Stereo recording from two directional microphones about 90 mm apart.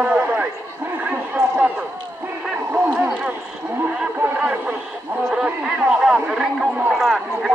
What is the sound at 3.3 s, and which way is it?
Radio, 15° right (ahead or behind).